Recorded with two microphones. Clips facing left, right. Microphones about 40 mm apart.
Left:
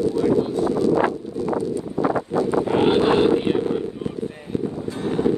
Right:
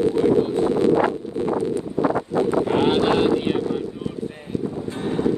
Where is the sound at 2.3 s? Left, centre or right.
Left.